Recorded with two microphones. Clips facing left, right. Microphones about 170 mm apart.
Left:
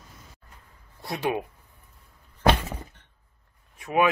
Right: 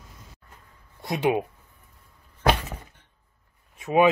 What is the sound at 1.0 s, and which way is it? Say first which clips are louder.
Speech: right 4 dB; 20° right (ahead or behind).